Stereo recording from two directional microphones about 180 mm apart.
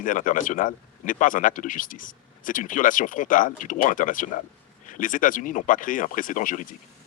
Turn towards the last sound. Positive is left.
turn(degrees=45)  # may be behind; listen again after turning